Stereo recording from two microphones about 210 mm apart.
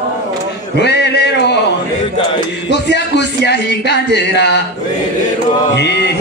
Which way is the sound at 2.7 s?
55° left (ahead or behind).